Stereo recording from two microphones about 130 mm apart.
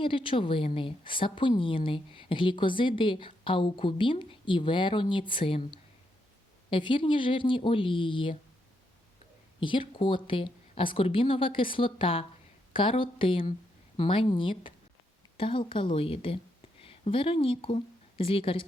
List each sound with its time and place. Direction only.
0.0 s a woman's voice: 45° left (ahead or behind)
6.7 s a woman's voice: 40° left (ahead or behind)
9.6 s a woman's voice: 40° left (ahead or behind)